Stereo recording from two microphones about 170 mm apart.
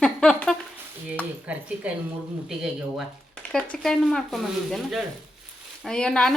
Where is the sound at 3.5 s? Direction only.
5° left (ahead or behind).